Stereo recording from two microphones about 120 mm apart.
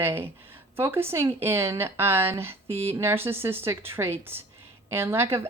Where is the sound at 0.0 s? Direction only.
20° right (ahead or behind).